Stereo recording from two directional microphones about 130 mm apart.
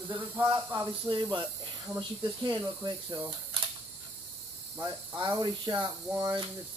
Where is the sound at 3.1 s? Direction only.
30° right (ahead or behind).